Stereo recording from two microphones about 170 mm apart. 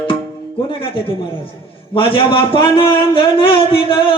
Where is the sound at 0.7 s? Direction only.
30° left (ahead or behind).